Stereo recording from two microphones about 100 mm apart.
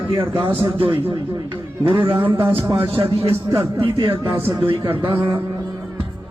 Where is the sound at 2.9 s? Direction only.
75° right (ahead or behind).